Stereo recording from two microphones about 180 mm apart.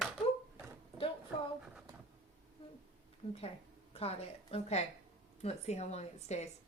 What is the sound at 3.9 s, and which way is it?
A woman's voice, 35° left (ahead or behind).